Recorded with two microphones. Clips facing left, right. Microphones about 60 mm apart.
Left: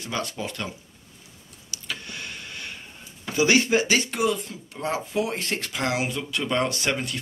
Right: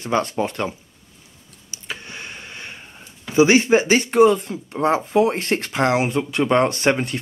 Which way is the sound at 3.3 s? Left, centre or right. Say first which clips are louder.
Right 6 dB; right.